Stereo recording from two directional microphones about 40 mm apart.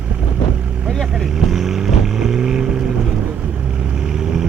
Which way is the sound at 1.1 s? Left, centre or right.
Centre.